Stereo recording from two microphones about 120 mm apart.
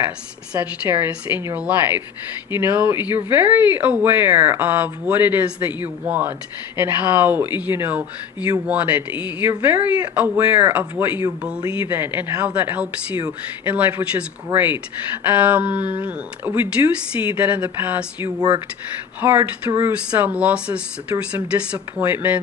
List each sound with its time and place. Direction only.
0.5 s speech: 15° right (ahead or behind)
9.5 s speech: 30° right (ahead or behind)
10.7 s speech: 15° right (ahead or behind)